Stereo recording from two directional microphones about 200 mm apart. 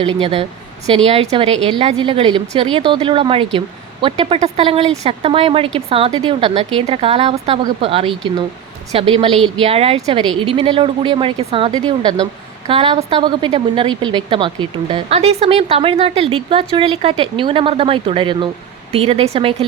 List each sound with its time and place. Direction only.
0.0 s a woman's voice: 30° right (ahead or behind)